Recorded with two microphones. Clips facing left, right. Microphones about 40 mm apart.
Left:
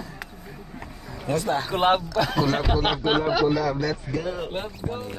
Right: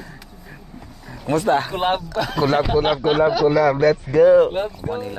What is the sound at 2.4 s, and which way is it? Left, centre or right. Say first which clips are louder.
Speech: right 6 dB; right.